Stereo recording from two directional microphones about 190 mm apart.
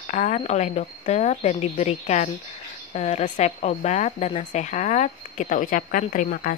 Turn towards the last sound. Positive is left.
turn(degrees=45)  # may be behind; listen again after turning